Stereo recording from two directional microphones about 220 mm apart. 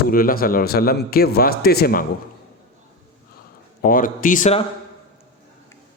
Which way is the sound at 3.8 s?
40° left (ahead or behind).